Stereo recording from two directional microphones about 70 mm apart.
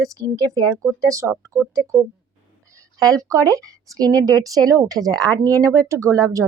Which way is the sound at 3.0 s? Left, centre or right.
Right.